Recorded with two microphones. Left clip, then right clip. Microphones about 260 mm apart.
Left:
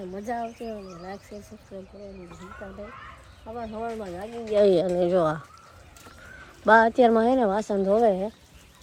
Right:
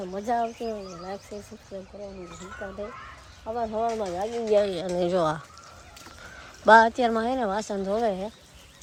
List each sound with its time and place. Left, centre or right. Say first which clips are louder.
0.1 s speech: right 5 dB; centre
3.5 s speech: right 6 dB; centre
4.6 s speech: left 6 dB; centre
6.7 s speech: even; centre